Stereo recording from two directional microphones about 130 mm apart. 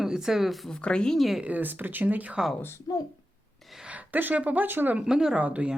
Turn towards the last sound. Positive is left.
turn(degrees=-10)  # may be behind; listen again after turning